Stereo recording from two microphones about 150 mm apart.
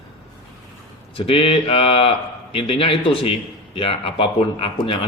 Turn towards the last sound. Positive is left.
turn(degrees=35)  # may be behind; listen again after turning